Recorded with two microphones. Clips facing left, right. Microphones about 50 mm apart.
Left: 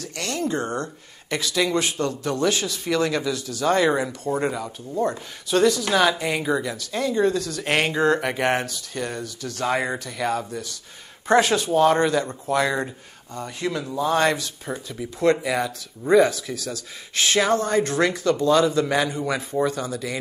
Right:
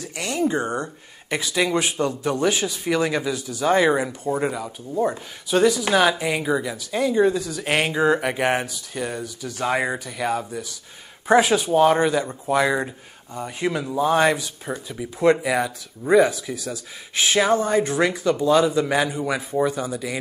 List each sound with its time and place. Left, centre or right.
0.0 s speech: centre
4.4 s speech: centre